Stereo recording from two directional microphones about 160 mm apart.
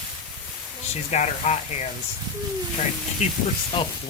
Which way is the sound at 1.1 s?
45° left (ahead or behind).